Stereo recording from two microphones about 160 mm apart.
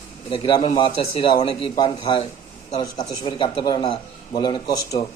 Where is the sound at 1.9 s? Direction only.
40° left (ahead or behind).